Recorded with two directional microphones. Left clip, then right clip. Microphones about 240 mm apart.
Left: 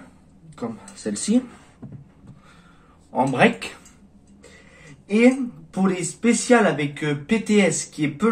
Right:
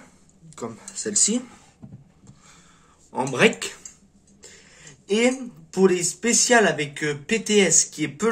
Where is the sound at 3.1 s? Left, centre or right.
Right.